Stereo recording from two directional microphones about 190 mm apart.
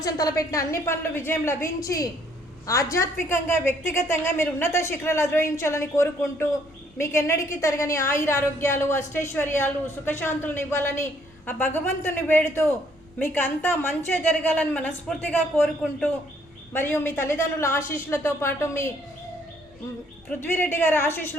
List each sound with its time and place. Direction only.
0.0 s a woman's voice: 20° left (ahead or behind)
16.7 s a woman's voice: 10° left (ahead or behind)
20.4 s a woman's voice: 10° left (ahead or behind)